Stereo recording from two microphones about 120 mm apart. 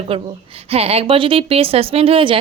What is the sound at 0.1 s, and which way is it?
A woman's voice, 50° right (ahead or behind).